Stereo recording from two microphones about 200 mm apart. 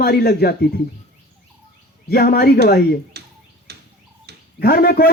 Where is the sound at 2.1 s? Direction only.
50° left (ahead or behind).